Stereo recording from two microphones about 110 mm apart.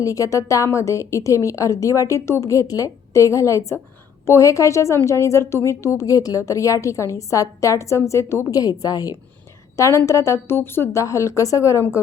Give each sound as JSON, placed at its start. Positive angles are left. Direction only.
{"t": 0.0, "sound": "a woman's voice", "side_deg": 30}